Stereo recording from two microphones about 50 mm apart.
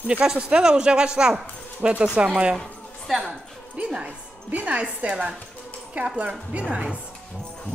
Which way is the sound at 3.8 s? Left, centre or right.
Right.